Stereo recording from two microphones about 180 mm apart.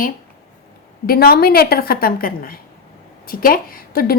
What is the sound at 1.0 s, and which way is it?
A woman's voice, 55° left (ahead or behind).